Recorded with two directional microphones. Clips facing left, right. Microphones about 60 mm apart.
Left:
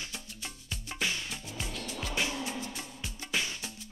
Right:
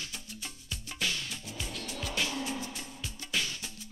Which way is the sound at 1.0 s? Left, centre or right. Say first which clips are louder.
Left 1 dB; centre.